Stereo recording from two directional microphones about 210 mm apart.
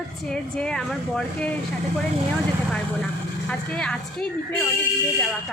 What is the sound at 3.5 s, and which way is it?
A woman's voice, 5° left (ahead or behind).